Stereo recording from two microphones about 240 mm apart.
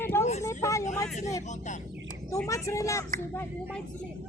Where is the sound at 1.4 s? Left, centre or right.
Left.